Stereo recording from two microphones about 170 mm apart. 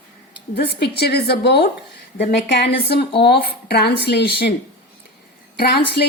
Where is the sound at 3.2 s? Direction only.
70° left (ahead or behind).